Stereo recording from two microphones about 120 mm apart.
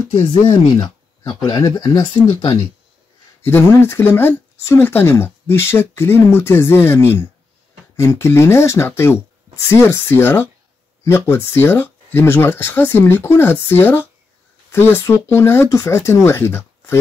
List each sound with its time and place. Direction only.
0.2 s speech: 45° left (ahead or behind)
3.4 s speech: 20° left (ahead or behind)